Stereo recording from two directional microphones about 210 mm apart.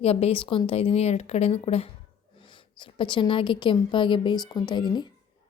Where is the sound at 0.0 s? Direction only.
30° left (ahead or behind).